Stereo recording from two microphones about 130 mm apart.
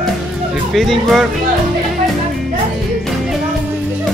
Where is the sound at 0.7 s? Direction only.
Centre (ahead or behind).